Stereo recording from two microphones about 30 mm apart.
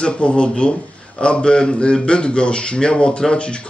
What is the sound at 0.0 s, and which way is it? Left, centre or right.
A man's voice, left.